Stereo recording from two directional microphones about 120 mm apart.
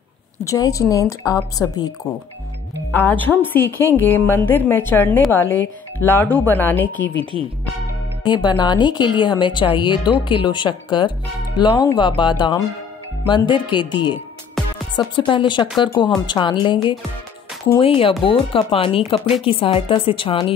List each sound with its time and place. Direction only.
0.4 s a woman's voice: 30° left (ahead or behind)
2.9 s a woman's voice: 15° left (ahead or behind)
8.2 s speech: 40° left (ahead or behind)